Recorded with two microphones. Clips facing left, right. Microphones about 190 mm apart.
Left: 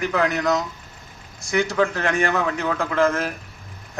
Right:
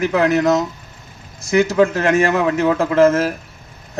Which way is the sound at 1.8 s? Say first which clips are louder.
Right 6 dB; 45° right (ahead or behind).